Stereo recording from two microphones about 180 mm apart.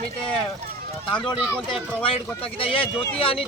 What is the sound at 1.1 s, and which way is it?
Speech, 5° left (ahead or behind).